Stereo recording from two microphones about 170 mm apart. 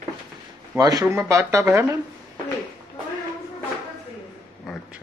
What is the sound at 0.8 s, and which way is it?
Speech, 20° right (ahead or behind).